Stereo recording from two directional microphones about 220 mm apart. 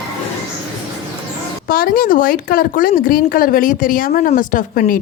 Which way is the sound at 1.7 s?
40° left (ahead or behind).